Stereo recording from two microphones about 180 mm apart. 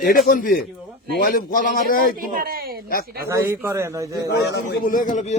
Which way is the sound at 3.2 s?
15° right (ahead or behind).